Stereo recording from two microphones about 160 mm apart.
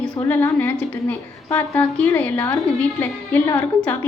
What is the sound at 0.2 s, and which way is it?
A woman's voice, 15° left (ahead or behind).